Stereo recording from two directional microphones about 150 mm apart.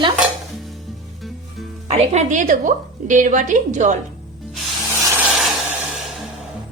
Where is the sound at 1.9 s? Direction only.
45° right (ahead or behind).